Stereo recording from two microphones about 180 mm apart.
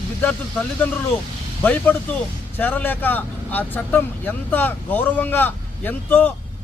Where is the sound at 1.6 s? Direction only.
10° left (ahead or behind).